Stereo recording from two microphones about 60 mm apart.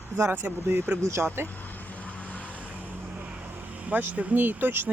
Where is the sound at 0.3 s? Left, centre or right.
Right.